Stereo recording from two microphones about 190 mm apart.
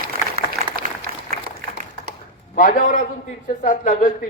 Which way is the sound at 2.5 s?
45° left (ahead or behind).